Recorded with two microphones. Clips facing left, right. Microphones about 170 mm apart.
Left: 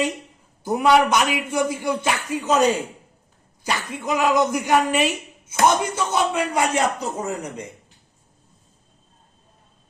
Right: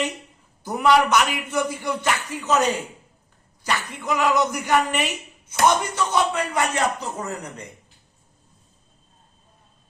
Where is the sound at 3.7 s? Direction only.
20° left (ahead or behind).